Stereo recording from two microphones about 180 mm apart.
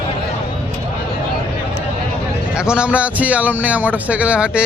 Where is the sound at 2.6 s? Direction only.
5° right (ahead or behind).